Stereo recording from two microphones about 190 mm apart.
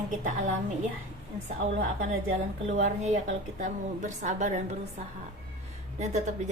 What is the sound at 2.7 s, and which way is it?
A woman's voice, 40° right (ahead or behind).